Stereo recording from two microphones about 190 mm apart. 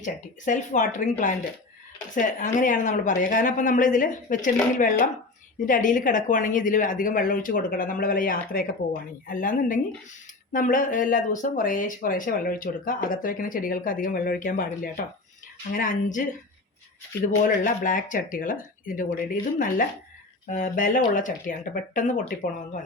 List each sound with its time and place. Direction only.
0.0 s speech: 40° left (ahead or behind)
17.4 s speech: 45° left (ahead or behind)